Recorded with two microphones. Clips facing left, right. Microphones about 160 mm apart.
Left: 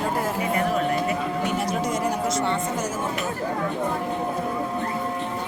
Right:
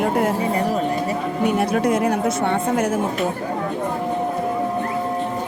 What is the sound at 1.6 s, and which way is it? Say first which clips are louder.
Speech: right 6 dB; 60° right (ahead or behind).